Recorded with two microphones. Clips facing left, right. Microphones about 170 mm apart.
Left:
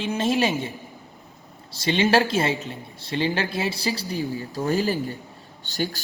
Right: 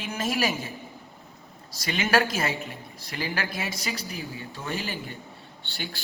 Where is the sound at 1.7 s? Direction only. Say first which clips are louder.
Left 5 dB; 30° left (ahead or behind).